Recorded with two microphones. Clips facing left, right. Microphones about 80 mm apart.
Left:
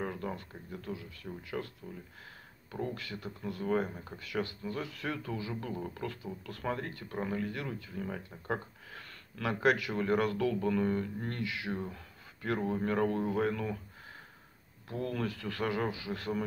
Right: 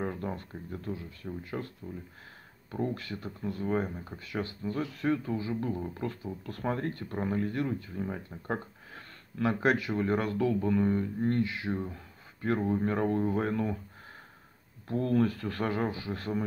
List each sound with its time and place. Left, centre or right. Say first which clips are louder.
0.0 s speech: right 3 dB; right
2.7 s speech: right 4 dB; right
3.4 s speech: right 1 dB; right
8.5 s a sound: right 1 dB; right
9.9 s speech: right 1 dB; right
11.9 s a sound: right 2 dB; right
12.6 s speech: even; right
14.9 s speech: right 8 dB; right